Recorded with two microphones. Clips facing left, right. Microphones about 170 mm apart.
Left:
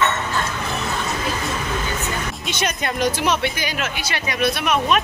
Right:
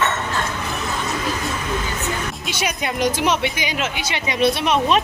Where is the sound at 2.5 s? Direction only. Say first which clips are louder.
Left 1 dB; 10° right (ahead or behind); by 5.0 s 30° right (ahead or behind).